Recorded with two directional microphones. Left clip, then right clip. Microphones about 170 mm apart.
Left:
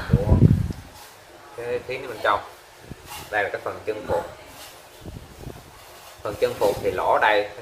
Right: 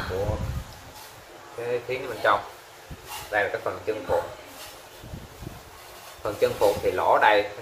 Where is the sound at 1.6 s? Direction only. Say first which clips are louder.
Even; 5° left (ahead or behind).